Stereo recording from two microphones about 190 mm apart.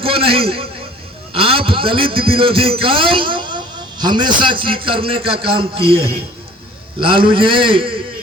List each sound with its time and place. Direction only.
0.0 s a man's voice: 30° right (ahead or behind)